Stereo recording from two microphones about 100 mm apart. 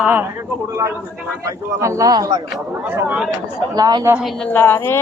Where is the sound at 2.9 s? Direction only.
20° right (ahead or behind).